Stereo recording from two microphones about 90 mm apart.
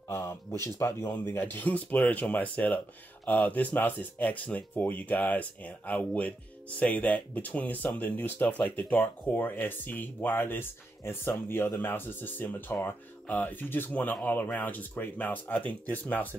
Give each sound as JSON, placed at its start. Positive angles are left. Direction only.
{"t": 0.1, "sound": "speech", "side_deg": 30}